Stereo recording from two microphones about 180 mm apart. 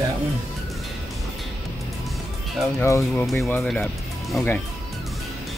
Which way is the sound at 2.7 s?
15° left (ahead or behind).